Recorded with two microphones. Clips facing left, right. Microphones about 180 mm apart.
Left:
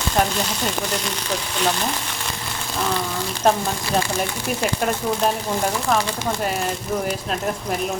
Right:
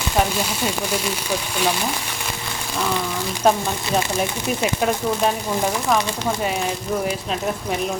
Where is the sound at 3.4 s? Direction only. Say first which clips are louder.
Right 1 dB; centre (ahead or behind).